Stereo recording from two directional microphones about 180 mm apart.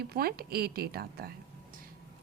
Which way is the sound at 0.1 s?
60° right (ahead or behind).